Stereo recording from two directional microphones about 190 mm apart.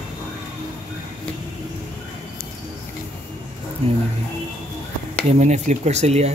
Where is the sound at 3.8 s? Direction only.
35° right (ahead or behind).